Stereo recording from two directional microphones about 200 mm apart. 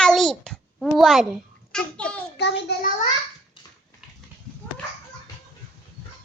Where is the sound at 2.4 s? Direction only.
60° left (ahead or behind).